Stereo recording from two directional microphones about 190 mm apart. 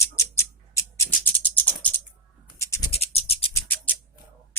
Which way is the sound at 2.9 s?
35° left (ahead or behind).